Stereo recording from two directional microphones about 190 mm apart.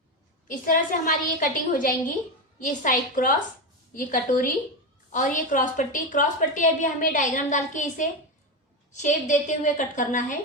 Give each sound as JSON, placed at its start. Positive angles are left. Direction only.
{"t": 0.4, "sound": "a woman's voice", "side_deg": 45}